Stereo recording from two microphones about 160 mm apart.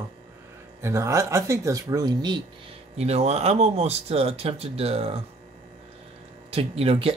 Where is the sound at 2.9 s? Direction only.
40° right (ahead or behind).